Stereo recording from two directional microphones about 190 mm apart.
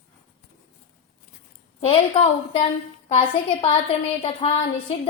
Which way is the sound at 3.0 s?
35° left (ahead or behind).